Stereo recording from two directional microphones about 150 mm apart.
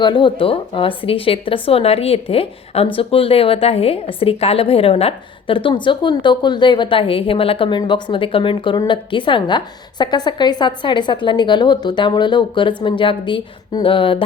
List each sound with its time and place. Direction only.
0.0 s speech: 30° left (ahead or behind)